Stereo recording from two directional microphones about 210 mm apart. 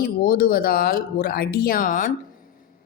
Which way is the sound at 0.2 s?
45° left (ahead or behind).